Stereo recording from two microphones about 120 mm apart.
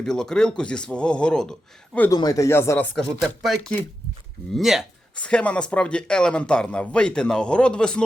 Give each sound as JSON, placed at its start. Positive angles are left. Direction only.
{"t": 0.0, "sound": "speech", "side_deg": 5}
{"t": 2.0, "sound": "speech", "side_deg": 30}
{"t": 3.2, "sound": "speech", "side_deg": 0}
{"t": 5.1, "sound": "speech", "side_deg": 10}